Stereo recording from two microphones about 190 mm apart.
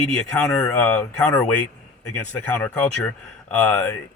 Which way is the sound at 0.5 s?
10° left (ahead or behind).